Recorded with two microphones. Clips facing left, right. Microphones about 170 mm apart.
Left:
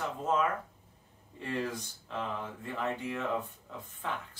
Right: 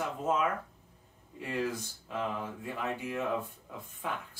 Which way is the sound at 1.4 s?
10° right (ahead or behind).